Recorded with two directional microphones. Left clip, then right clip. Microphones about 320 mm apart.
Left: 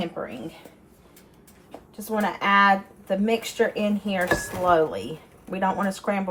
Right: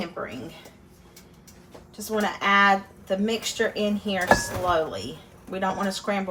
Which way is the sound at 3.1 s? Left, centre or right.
Centre.